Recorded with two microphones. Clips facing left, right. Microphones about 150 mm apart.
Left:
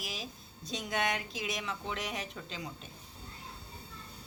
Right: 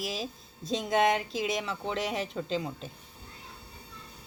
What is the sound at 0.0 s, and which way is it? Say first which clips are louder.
A woman's voice: right 8 dB; 30° right (ahead or behind).